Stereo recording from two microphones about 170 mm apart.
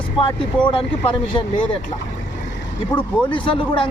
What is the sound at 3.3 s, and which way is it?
Speech, 30° left (ahead or behind).